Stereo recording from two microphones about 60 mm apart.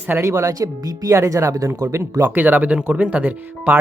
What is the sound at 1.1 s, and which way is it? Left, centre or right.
Speech, right.